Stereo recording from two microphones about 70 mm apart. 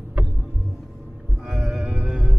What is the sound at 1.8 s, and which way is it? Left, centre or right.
Music, centre.